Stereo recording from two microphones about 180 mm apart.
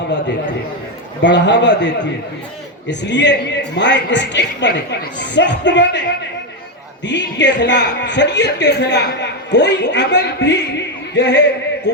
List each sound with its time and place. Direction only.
1.2 s a man's voice: 80° left
2.9 s a man's voice: 75° left (ahead or behind)
7.0 s a man's voice: 80° left